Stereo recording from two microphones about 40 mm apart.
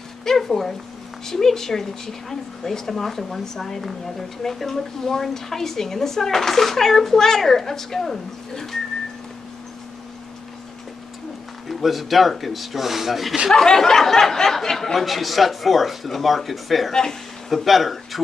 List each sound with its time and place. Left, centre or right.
0.2 s a woman's voice: centre
11.7 s speech: centre
13.5 s speech: centre
16.9 s a woman's voice: centre
17.5 s speech: centre